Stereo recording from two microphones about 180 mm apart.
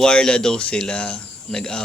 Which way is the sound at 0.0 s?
5° left (ahead or behind).